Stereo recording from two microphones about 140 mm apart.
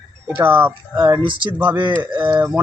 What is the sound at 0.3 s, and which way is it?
Speech, 10° right (ahead or behind).